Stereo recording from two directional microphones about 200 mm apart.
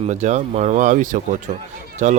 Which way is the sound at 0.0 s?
35° right (ahead or behind).